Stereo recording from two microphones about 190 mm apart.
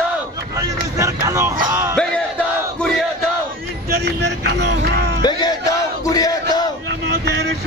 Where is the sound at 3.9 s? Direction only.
60° right (ahead or behind).